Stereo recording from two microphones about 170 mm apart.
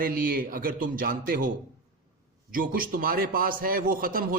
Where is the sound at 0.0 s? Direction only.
55° right (ahead or behind).